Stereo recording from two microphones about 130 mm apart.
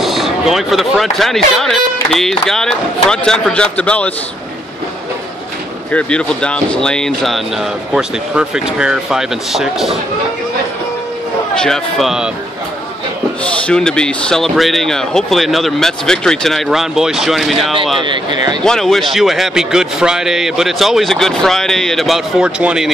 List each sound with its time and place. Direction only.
0.0 s speech: centre (ahead or behind)
5.9 s speech: 10° left (ahead or behind)
11.5 s speech: 5° left (ahead or behind)
13.4 s speech: 5° left (ahead or behind)
18.0 s speech: 35° right (ahead or behind)
18.6 s speech: 5° left (ahead or behind)